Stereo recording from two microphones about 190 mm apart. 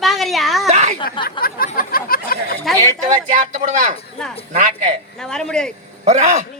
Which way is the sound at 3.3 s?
40° right (ahead or behind).